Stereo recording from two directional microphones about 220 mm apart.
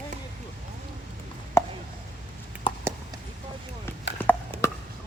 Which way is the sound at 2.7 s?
20° left (ahead or behind).